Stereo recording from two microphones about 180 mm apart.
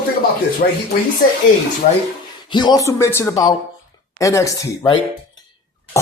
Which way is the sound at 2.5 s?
25° left (ahead or behind).